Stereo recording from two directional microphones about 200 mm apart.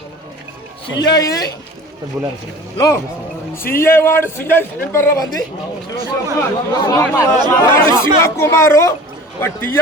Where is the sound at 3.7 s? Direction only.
10° left (ahead or behind).